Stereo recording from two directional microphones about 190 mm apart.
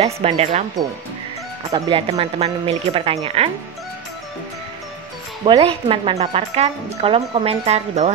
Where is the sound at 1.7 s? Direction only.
20° right (ahead or behind).